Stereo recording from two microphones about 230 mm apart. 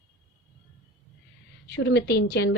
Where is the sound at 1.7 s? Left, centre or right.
Left.